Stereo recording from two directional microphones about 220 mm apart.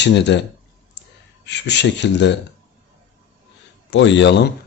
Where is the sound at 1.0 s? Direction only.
50° left (ahead or behind).